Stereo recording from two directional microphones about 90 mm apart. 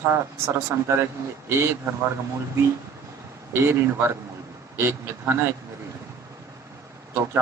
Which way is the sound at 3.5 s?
25° right (ahead or behind).